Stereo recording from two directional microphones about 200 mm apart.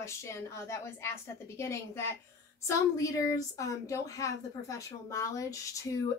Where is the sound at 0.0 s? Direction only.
15° left (ahead or behind).